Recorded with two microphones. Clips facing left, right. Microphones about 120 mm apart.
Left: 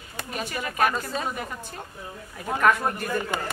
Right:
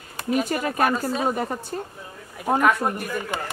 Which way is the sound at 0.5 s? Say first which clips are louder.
Right 3 dB; 40° right (ahead or behind).